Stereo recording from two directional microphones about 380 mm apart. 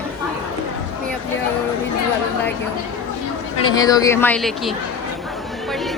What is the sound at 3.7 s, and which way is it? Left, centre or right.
Speech, centre.